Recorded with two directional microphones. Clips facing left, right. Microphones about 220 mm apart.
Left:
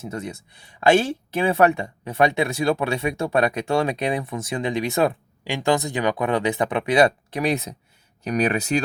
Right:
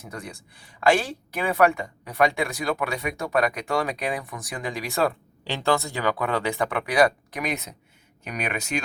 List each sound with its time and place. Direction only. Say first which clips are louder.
0.0 s speech: left 7 dB; 25° left (ahead or behind)